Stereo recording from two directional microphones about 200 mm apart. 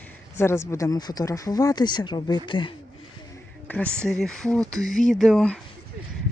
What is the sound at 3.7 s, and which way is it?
Speech, 5° left (ahead or behind).